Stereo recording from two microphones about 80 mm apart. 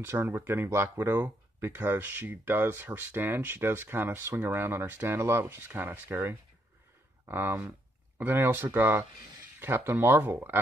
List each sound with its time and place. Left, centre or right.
0.0 s speech: right